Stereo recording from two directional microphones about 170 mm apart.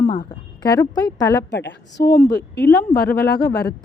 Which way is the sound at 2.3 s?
75° left (ahead or behind).